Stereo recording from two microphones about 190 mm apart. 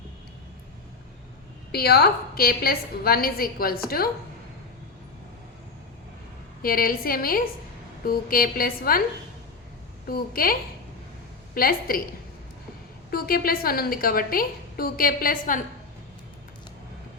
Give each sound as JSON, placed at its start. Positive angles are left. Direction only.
{"t": 1.7, "sound": "a woman's voice", "side_deg": 55}
{"t": 6.6, "sound": "a woman's voice", "side_deg": 50}
{"t": 10.1, "sound": "a woman's voice", "side_deg": 50}
{"t": 13.1, "sound": "a woman's voice", "side_deg": 50}